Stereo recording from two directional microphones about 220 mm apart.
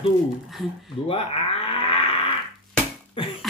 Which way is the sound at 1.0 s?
25° left (ahead or behind).